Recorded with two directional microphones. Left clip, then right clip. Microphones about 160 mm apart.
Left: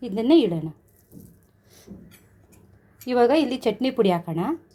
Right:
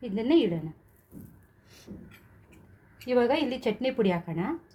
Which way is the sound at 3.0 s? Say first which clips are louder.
Left 6 dB; 55° left (ahead or behind).